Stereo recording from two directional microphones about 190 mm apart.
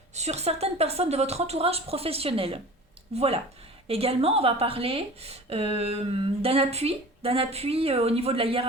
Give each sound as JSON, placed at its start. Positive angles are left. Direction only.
{"t": 0.1, "sound": "speech", "side_deg": -35}